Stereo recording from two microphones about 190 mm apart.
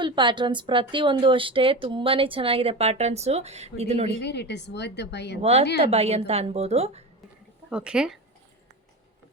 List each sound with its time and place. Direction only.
0.0 s a woman's voice: 25° right (ahead or behind)
4.2 s a woman's voice: 65° left (ahead or behind)
5.4 s a woman's voice: 35° right (ahead or behind)
7.7 s speech: 5° right (ahead or behind)